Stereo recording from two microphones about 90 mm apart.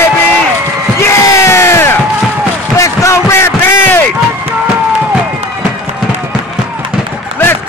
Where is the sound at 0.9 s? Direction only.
30° left (ahead or behind).